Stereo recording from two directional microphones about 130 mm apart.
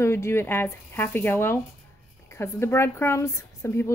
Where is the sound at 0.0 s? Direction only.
20° left (ahead or behind).